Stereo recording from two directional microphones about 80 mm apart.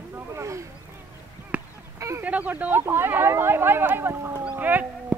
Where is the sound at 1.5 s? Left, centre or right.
Centre.